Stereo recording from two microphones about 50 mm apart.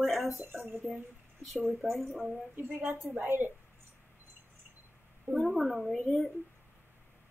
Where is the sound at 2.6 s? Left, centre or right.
Right.